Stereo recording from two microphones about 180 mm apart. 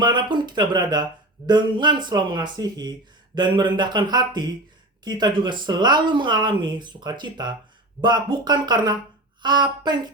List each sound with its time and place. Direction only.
0.0 s speech: 25° right (ahead or behind)